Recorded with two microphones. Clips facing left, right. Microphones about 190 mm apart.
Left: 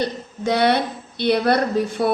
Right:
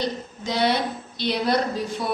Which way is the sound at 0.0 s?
60° left (ahead or behind).